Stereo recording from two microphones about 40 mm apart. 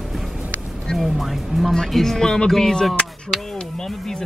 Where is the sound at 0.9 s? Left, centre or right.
Centre.